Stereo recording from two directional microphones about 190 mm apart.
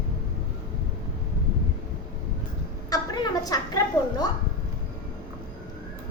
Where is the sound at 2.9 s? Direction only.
20° left (ahead or behind).